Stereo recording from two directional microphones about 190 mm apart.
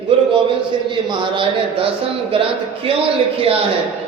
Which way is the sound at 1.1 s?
25° right (ahead or behind).